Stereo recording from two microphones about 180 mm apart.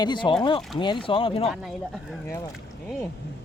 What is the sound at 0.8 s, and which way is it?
Speech, 25° left (ahead or behind).